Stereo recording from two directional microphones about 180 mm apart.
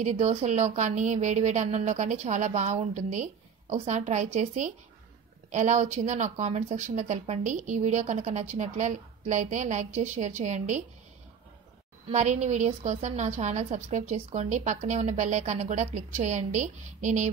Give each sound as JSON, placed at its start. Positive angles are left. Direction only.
{"t": 0.0, "sound": "speech", "side_deg": -35}
{"t": 12.1, "sound": "speech", "side_deg": -40}